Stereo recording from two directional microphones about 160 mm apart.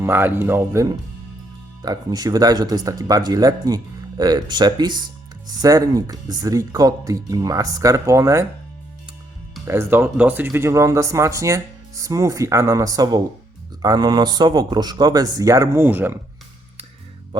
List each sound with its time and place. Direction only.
0.0 s speech: 15° right (ahead or behind)
9.6 s speech: 15° right (ahead or behind)